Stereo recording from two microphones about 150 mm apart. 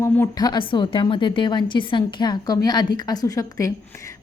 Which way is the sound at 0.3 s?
30° left (ahead or behind).